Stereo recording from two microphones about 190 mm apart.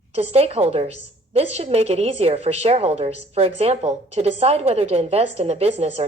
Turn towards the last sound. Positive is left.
turn(degrees=-35)  # may be behind; listen again after turning